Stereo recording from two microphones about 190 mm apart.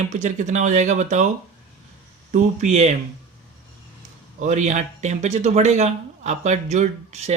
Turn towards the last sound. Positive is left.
turn(degrees=-35)  # may be behind; listen again after turning